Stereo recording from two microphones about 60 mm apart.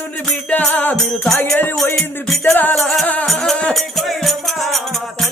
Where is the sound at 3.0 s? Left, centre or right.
Left.